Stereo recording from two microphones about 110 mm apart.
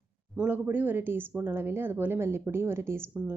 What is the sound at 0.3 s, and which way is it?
Speech, 15° right (ahead or behind).